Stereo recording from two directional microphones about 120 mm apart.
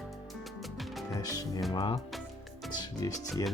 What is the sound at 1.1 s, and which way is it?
Speech, 30° left (ahead or behind).